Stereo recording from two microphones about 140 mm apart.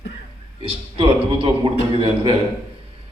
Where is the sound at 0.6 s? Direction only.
40° right (ahead or behind).